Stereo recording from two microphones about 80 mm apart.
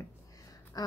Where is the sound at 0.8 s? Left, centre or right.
Left.